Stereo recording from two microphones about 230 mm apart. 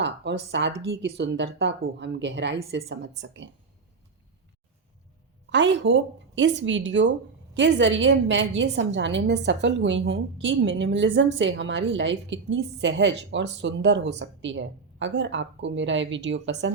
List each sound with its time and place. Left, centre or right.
0.0 s a woman's voice: right
5.5 s a woman's voice: right